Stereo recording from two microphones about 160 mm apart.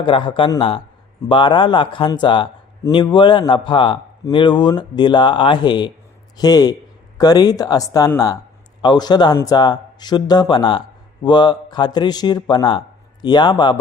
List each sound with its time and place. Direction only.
0.0 s a man's voice: 30° left (ahead or behind)